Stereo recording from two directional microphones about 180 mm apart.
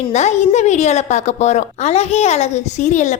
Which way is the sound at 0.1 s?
40° left (ahead or behind).